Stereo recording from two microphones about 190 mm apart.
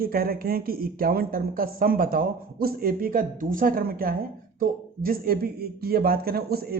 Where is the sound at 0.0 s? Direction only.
50° right (ahead or behind).